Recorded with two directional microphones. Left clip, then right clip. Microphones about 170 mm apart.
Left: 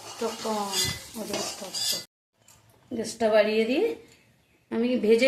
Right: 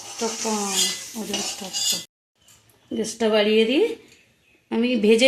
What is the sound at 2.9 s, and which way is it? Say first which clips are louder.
A woman's voice: right 1 dB; 55° right (ahead or behind).